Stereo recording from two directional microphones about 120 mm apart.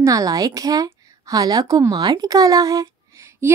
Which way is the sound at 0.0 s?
30° right (ahead or behind).